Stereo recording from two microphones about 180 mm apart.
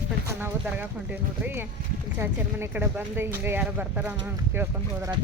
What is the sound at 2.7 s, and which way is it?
Speech, 10° right (ahead or behind).